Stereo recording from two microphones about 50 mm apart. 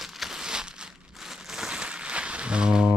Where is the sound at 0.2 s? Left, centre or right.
Centre.